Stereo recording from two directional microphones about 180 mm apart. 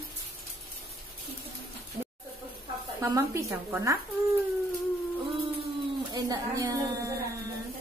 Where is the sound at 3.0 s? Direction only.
15° right (ahead or behind).